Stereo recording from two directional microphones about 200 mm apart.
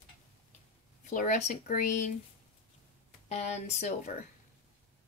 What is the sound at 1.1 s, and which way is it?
Speech, 40° left (ahead or behind).